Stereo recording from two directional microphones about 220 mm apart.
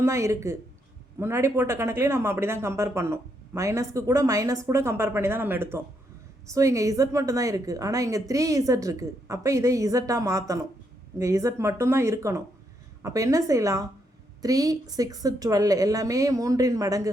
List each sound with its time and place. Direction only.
0.0 s speech: 15° right (ahead or behind)